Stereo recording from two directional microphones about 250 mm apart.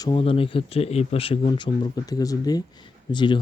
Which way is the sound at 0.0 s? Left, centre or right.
Left.